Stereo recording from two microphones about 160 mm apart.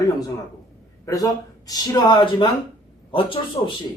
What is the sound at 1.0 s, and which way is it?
A man's voice, 20° left (ahead or behind).